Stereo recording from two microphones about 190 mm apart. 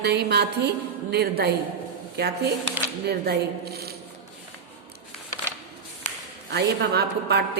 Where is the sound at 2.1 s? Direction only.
55° right (ahead or behind).